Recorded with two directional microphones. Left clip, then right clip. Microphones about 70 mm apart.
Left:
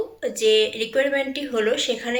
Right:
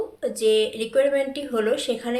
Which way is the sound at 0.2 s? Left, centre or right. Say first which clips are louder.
Left 2 dB; centre.